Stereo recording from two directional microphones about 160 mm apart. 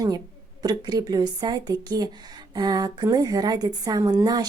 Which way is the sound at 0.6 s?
25° right (ahead or behind).